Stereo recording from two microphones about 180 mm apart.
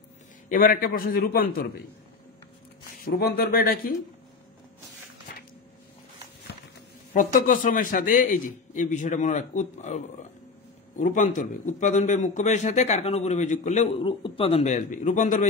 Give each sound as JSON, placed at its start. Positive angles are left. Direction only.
{"t": 0.5, "sound": "a man's voice", "side_deg": 50}
{"t": 3.1, "sound": "a man's voice", "side_deg": 60}
{"t": 7.2, "sound": "a man's voice", "side_deg": 50}